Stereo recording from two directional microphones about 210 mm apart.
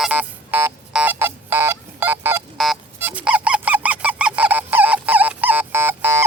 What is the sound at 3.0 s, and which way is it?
Goose, 10° right (ahead or behind).